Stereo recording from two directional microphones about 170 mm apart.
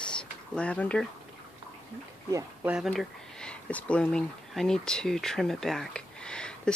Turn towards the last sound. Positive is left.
turn(degrees=5)  # may be behind; listen again after turning